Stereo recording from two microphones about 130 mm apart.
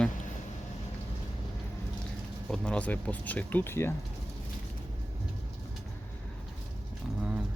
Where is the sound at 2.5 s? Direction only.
10° left (ahead or behind).